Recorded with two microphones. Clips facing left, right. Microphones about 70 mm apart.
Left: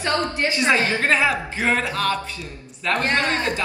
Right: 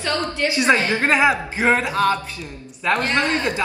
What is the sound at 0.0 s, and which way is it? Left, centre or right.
Speech, left.